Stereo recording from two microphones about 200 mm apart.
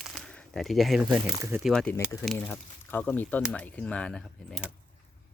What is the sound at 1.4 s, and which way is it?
Speech, 15° right (ahead or behind).